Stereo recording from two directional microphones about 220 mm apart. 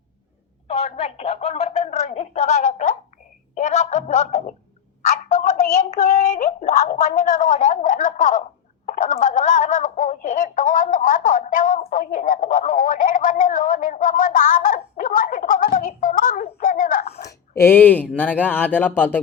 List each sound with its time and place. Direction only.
0.7 s music: 30° left (ahead or behind)
3.5 s a sound: 30° left (ahead or behind)
8.9 s speech: 35° left (ahead or behind)
17.6 s speech: 10° left (ahead or behind)